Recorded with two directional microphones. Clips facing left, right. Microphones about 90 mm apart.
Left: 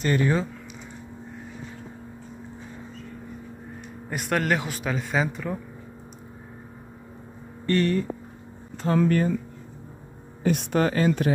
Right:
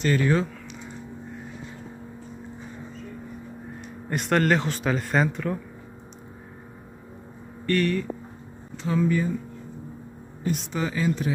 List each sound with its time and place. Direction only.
0.1 s speech: 15° left (ahead or behind)
4.1 s speech: 5° left (ahead or behind)
7.6 s speech: 30° left (ahead or behind)
8.7 s speech: 55° left (ahead or behind)
10.4 s speech: 65° left (ahead or behind)